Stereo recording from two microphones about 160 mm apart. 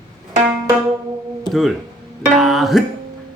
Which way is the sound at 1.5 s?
Centre (ahead or behind).